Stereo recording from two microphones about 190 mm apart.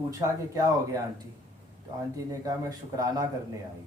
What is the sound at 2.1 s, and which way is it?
Speech, 15° right (ahead or behind).